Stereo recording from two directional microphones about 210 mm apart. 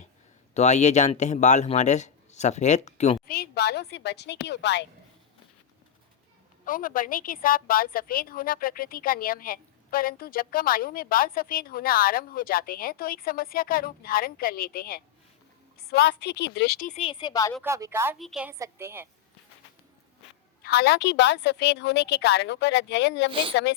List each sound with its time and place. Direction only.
0.5 s speech: 35° left (ahead or behind)
3.2 s a woman's voice: 50° left (ahead or behind)
6.7 s a woman's voice: 40° left (ahead or behind)
16.9 s speech: 25° left (ahead or behind)
17.6 s a woman's voice: 15° right (ahead or behind)
20.6 s a woman's voice: 50° left (ahead or behind)
23.3 s a woman's voice: 25° right (ahead or behind)